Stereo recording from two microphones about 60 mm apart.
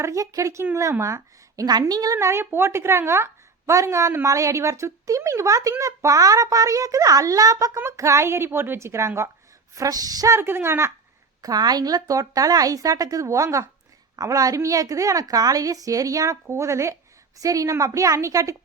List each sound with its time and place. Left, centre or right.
0.0 s a woman's voice: right
1.9 s a sound: right
2.1 s a woman's voice: right
3.7 s a woman's voice: right
7.9 s a woman's voice: right
9.7 s a sound: right
10.3 s a woman's voice: right
11.4 s a woman's voice: right
14.2 s a woman's voice: right
16.5 s a woman's voice: right